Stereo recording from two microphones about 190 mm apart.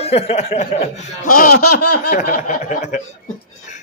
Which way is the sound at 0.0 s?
30° left (ahead or behind).